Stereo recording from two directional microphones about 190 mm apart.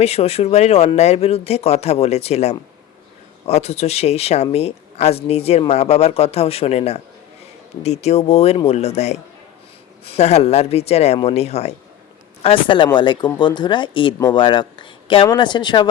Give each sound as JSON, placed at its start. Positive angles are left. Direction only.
{"t": 0.0, "sound": "speech", "side_deg": 35}